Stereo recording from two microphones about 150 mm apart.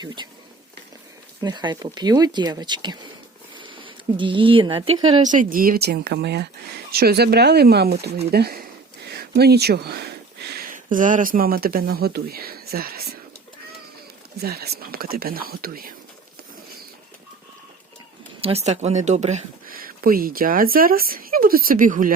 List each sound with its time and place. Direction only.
1.4 s speech: 25° right (ahead or behind)
5.2 s speech: 60° right (ahead or behind); by 13.1 s 90° right
14.4 s speech: 90° right
18.3 s speech: 40° right (ahead or behind)
19.6 s speech: 75° right (ahead or behind)